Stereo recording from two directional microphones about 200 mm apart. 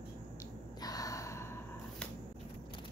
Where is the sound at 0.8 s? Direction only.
20° left (ahead or behind).